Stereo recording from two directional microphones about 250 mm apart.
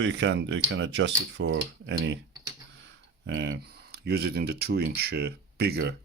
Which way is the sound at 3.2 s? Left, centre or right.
Right.